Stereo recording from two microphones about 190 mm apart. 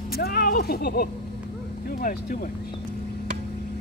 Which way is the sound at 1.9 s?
50° left (ahead or behind).